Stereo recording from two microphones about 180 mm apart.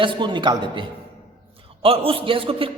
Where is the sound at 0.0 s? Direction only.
25° right (ahead or behind).